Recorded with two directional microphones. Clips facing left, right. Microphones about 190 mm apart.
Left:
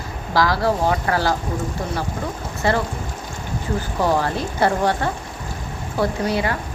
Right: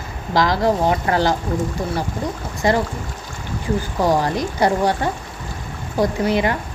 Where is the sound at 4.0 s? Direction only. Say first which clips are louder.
Right 1 dB; 15° right (ahead or behind).